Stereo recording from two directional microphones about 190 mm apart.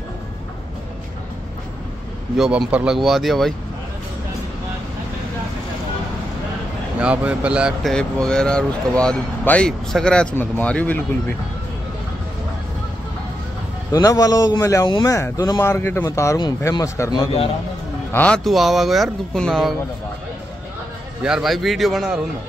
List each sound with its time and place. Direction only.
2.3 s speech: centre (ahead or behind)
7.0 s speech: 5° right (ahead or behind)
13.9 s a man's voice: 20° left (ahead or behind); by 19.7 s centre (ahead or behind)
21.2 s speech: centre (ahead or behind)